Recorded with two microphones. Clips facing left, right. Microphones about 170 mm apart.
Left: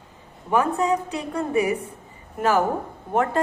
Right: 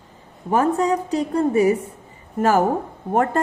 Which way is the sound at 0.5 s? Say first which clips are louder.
Right 3 dB; 40° right (ahead or behind).